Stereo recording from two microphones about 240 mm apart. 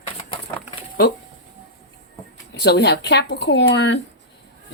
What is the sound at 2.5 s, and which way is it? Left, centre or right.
Speech, left.